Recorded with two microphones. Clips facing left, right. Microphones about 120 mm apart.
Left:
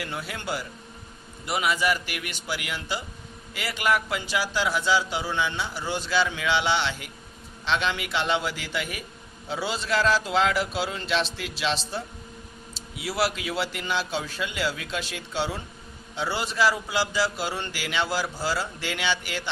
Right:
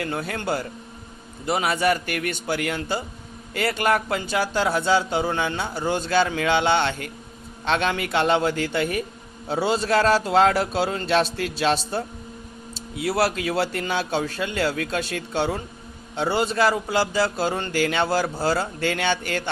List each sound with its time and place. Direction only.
0.2 s speech: 50° right (ahead or behind)
1.5 s a man's voice: 30° right (ahead or behind)
1.7 s speech: 50° right (ahead or behind); by 10.5 s 35° right (ahead or behind)
10.8 s a man's voice: 50° right (ahead or behind)